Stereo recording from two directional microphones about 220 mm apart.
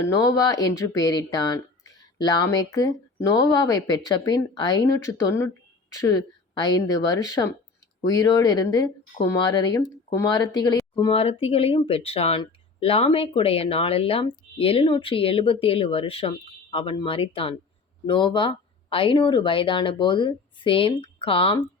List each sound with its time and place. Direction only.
0.0 s a woman's voice: 15° left (ahead or behind)